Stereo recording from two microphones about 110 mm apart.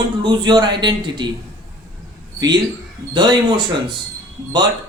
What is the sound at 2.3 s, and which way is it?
A man's voice, 40° right (ahead or behind).